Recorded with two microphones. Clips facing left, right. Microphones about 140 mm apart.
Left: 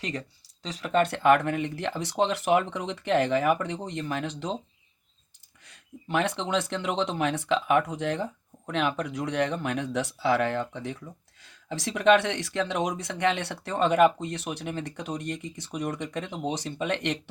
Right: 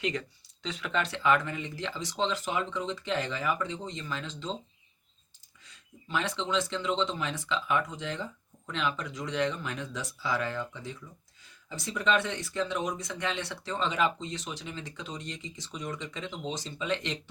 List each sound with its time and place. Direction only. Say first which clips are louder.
0.0 s speech: right 2 dB; 40° left (ahead or behind); by 4.5 s 65° left (ahead or behind)
5.6 s speech: left 7 dB; 60° left (ahead or behind)
11.3 s speech: left 7 dB; 75° left (ahead or behind)